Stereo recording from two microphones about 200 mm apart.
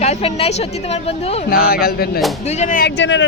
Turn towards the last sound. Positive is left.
turn(degrees=65)  # may be behind; listen again after turning